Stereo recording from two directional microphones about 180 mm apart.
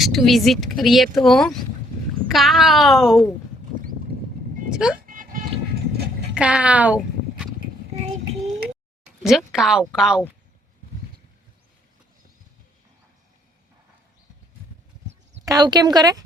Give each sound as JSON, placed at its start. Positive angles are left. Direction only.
{"t": 0.0, "sound": "speech", "side_deg": 0}
{"t": 4.7, "sound": "dog", "side_deg": -5}
{"t": 5.0, "sound": "a sound", "side_deg": -50}
{"t": 6.3, "sound": "a sound", "side_deg": -5}
{"t": 8.0, "sound": "child singing", "side_deg": -40}
{"t": 9.2, "sound": "speech", "side_deg": 0}
{"t": 15.4, "sound": "speech", "side_deg": -20}